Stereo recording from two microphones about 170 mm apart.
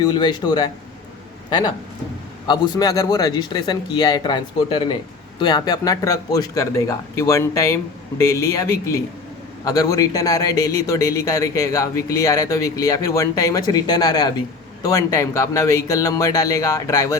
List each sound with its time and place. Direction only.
0.0 s a man's voice: 25° left (ahead or behind)